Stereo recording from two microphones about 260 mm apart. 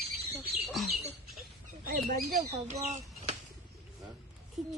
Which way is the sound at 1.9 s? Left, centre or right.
Right.